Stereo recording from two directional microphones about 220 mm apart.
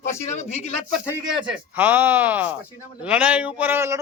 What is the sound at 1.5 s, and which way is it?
A man's voice, 5° right (ahead or behind).